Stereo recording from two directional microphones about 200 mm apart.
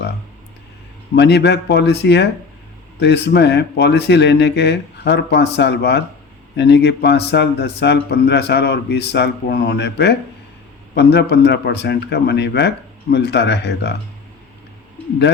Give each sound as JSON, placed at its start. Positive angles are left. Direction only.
{"t": 1.1, "sound": "speech", "side_deg": 60}